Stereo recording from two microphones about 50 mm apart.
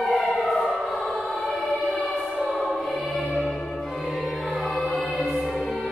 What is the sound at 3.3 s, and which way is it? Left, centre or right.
Church bell, centre.